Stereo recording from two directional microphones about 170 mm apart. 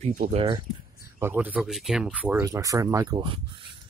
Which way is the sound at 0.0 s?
45° right (ahead or behind).